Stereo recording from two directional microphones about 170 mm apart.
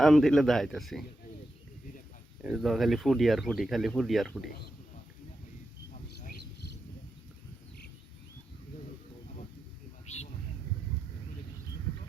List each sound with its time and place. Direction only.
0.0 s speech: centre (ahead or behind)
2.4 s speech: centre (ahead or behind)
6.1 s a sound: 60° left (ahead or behind)